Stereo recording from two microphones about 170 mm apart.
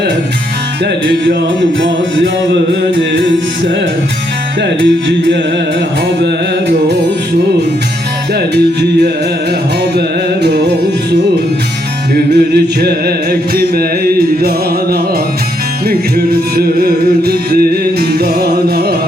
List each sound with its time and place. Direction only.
4.6 s speech: 90° right
6.2 s music: 80° right
8.5 s music: 70° right (ahead or behind)
12.1 s music: 70° right (ahead or behind)
15.9 s music: 65° right (ahead or behind)